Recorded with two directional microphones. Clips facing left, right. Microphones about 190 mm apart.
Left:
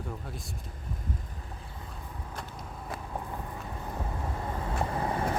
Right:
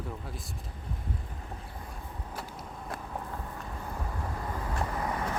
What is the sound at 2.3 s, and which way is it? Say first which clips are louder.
Vehicle: right 1 dB; 5° right (ahead or behind).